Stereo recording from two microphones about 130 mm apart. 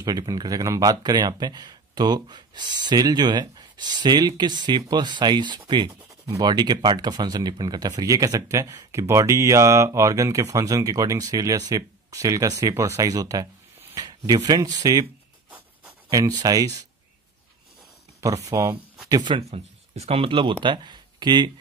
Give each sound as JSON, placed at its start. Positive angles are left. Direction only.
{"t": 0.0, "sound": "speech", "side_deg": -30}
{"t": 16.1, "sound": "speech", "side_deg": -30}
{"t": 18.2, "sound": "speech", "side_deg": -25}
{"t": 19.5, "sound": "speech", "side_deg": -50}